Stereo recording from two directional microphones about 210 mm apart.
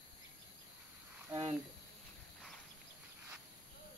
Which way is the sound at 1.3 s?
20° right (ahead or behind).